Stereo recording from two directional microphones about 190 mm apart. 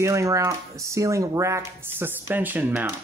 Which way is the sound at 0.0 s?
15° right (ahead or behind).